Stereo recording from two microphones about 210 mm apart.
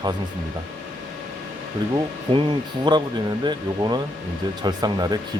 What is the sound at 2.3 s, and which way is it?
Speech, 25° right (ahead or behind).